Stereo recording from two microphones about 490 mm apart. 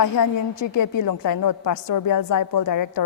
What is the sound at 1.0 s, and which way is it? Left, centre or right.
A woman's voice, left.